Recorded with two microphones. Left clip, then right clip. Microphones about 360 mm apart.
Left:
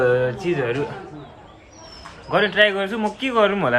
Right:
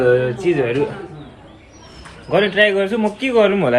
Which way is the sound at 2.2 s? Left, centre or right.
Centre.